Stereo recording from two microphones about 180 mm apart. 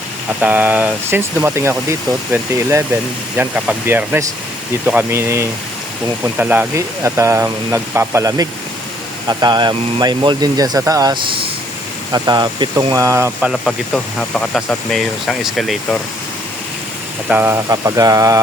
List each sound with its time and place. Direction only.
0.4 s speech: 10° right (ahead or behind)
13.5 s speech: 5° left (ahead or behind)
17.2 s speech: 10° right (ahead or behind)